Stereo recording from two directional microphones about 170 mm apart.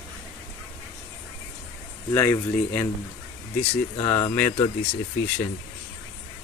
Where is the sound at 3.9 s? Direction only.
20° left (ahead or behind).